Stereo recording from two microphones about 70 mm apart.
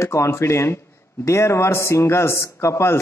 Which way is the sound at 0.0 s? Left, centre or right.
Left.